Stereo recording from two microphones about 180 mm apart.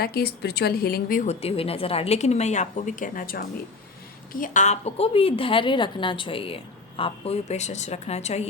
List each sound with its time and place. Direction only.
0.0 s a woman's voice: 60° left (ahead or behind); by 8.4 s 35° left (ahead or behind)